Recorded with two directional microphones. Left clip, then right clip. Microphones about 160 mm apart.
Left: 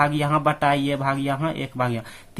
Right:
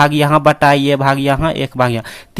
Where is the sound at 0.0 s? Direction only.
40° right (ahead or behind).